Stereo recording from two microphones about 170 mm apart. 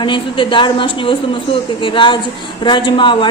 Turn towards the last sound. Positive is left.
turn(degrees=30)  # may be behind; listen again after turning